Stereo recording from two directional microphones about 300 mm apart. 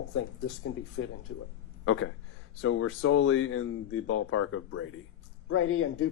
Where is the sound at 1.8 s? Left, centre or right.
Left.